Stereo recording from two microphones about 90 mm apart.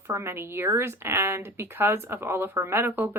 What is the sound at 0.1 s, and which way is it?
Speech, 30° right (ahead or behind).